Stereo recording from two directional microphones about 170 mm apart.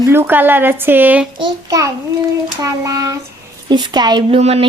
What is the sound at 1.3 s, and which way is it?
A child's voice, 20° right (ahead or behind).